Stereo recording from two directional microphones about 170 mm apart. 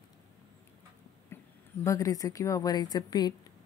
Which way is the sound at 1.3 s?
15° left (ahead or behind).